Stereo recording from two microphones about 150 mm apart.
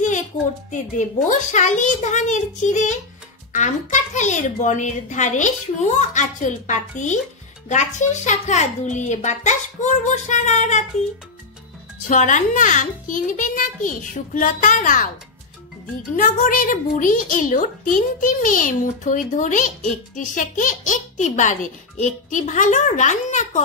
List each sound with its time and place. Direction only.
0.7 s a woman's voice: 55° left (ahead or behind)
12.1 s a woman's voice: 55° left (ahead or behind)
16.2 s a woman's voice: 65° left (ahead or behind)